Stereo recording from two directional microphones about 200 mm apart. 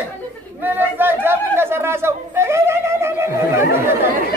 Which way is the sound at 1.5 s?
10° right (ahead or behind).